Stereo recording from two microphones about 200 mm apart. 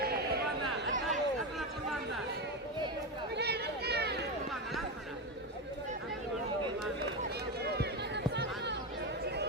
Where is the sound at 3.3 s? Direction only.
55° right (ahead or behind).